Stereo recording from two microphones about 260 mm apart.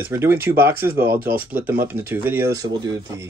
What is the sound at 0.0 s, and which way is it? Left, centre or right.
Speech, centre.